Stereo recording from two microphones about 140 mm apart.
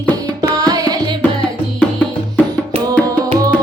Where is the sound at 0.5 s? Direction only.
25° right (ahead or behind).